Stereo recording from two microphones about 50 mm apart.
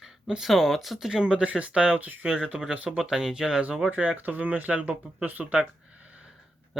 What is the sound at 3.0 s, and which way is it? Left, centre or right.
Speech, centre.